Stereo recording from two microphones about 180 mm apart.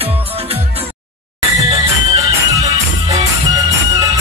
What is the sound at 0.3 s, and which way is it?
Music, 35° right (ahead or behind).